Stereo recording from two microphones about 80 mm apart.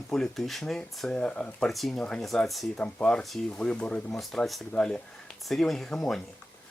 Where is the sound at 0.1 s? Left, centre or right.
Centre.